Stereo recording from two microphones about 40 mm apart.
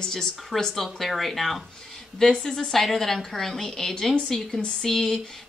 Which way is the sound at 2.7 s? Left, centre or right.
Centre.